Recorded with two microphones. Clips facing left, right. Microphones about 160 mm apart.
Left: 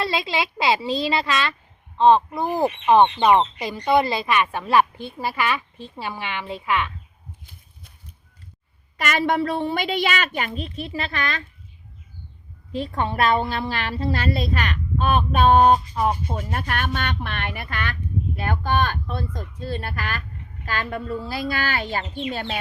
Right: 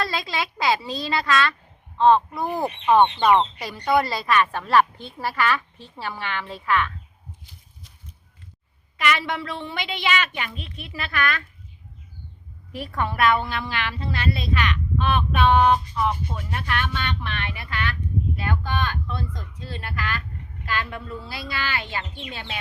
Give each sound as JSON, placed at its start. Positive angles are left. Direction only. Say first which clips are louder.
{"t": 0.1, "sound": "a woman's voice", "louder": "left 3 dB", "side_deg": 20}
{"t": 9.0, "sound": "a woman's voice", "louder": "left 3 dB", "side_deg": 45}
{"t": 12.7, "sound": "a woman's voice", "louder": "left 3 dB", "side_deg": 25}